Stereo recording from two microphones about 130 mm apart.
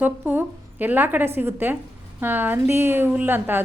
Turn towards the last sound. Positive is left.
turn(degrees=-15)  # may be behind; listen again after turning